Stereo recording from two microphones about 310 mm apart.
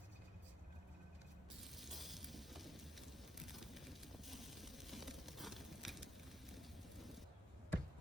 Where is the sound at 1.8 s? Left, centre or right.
Centre.